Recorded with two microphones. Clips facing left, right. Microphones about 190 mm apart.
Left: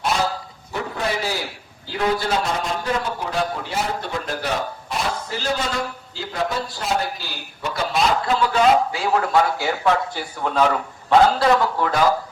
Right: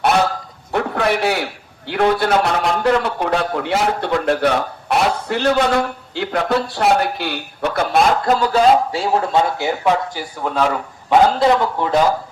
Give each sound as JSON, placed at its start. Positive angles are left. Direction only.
{"t": 0.0, "sound": "dog", "side_deg": -65}
{"t": 0.7, "sound": "a sound", "side_deg": -70}
{"t": 1.9, "sound": "a man's voice", "side_deg": -65}
{"t": 11.1, "sound": "a man's voice", "side_deg": -20}